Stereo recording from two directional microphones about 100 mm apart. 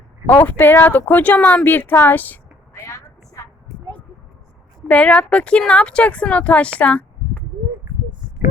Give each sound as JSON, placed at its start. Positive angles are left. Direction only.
{"t": 0.3, "sound": "speech", "side_deg": 15}
{"t": 2.8, "sound": "a sound", "side_deg": 30}
{"t": 4.9, "sound": "speech", "side_deg": 15}